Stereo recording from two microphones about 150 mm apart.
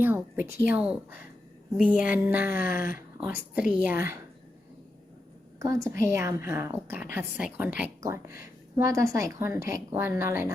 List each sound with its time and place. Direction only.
0.0 s a woman's voice: 15° right (ahead or behind)
5.5 s a woman's voice: 20° right (ahead or behind)
8.7 s a woman's voice: 20° right (ahead or behind)